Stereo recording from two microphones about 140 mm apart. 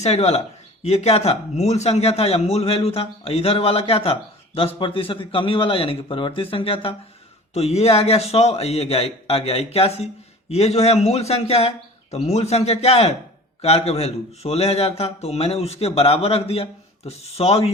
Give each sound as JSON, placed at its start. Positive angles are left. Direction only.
{"t": 0.0, "sound": "speech", "side_deg": 50}